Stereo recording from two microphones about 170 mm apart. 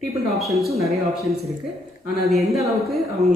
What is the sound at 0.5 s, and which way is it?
Speech, centre (ahead or behind).